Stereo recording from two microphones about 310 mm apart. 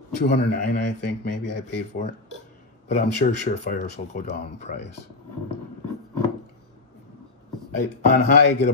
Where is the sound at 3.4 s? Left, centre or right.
Left.